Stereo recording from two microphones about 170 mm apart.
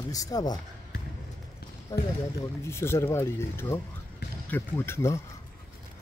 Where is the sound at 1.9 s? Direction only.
20° left (ahead or behind).